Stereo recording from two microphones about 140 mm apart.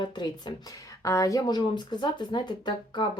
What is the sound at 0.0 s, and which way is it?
Speech, 30° left (ahead or behind).